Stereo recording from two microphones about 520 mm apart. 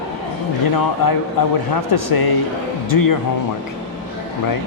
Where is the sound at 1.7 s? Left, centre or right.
Left.